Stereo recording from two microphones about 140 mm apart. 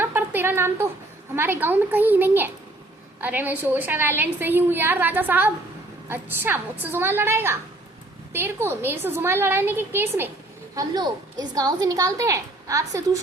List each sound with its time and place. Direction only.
0.0 s a sound: 15° right (ahead or behind)
1.4 s a woman's voice: 15° right (ahead or behind)
10.8 s a woman's voice: 30° right (ahead or behind)